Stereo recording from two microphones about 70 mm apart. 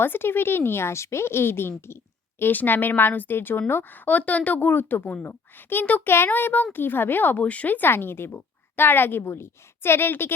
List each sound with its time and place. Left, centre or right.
0.0 s a woman's voice: left